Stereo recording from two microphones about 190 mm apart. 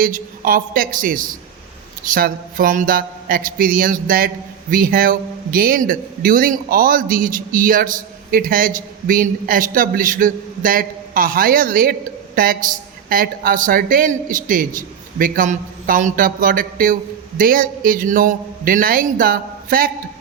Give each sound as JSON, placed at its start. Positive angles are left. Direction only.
{"t": 0.0, "sound": "a man's voice", "side_deg": -50}